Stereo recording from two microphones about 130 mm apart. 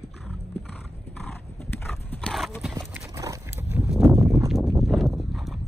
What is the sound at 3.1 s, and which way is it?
Horse, 25° right (ahead or behind).